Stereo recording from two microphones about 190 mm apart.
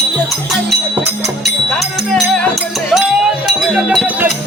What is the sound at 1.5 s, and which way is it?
Music, centre (ahead or behind).